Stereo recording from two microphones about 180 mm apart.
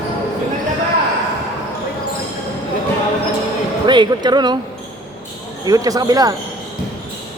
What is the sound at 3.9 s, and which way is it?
Speech, 25° right (ahead or behind).